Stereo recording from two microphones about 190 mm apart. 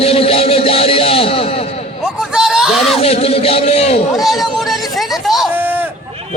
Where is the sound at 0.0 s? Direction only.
30° left (ahead or behind).